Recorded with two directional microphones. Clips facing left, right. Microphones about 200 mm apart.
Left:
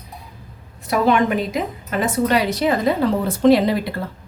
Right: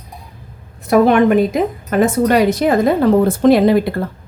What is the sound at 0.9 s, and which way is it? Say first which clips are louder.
A woman's voice: right 7 dB; 50° right (ahead or behind).